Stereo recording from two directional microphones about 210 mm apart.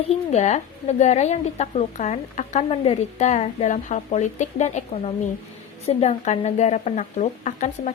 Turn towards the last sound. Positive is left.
turn(degrees=35)  # may be behind; listen again after turning